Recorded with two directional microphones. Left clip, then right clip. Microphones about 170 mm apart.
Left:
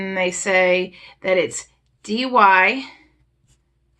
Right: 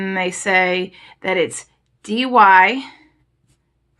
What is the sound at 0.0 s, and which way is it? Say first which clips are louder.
Speech: right 1 dB; 30° right (ahead or behind).